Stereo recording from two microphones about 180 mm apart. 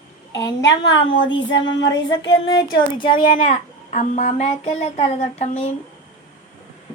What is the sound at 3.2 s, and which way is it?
Speech, 45° left (ahead or behind).